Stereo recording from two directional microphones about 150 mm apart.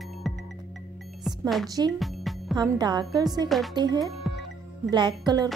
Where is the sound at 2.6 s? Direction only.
30° right (ahead or behind).